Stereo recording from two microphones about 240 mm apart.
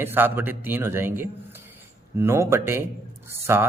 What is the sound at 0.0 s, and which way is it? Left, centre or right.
A man's voice, centre.